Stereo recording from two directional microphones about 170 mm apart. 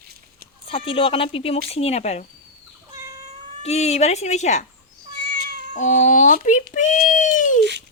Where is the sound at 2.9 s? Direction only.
20° right (ahead or behind).